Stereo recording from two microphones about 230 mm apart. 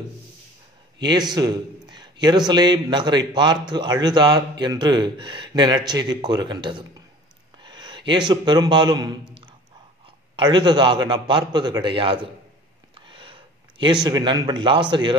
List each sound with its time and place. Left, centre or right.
1.0 s a man's voice: centre
7.6 s a sound: centre
8.3 s a man's voice: centre
10.3 s a man's voice: centre
12.9 s a sound: right
14.0 s a man's voice: centre